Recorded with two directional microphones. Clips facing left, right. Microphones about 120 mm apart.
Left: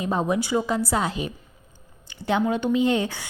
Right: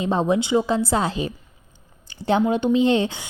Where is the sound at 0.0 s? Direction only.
25° right (ahead or behind).